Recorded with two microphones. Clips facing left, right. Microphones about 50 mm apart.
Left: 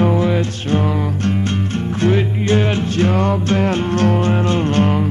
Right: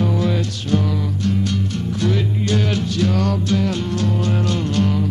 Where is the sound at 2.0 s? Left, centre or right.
Left.